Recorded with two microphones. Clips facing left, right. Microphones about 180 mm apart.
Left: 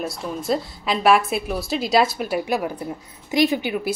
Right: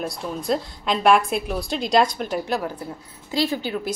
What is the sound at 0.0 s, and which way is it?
Speech, centre (ahead or behind).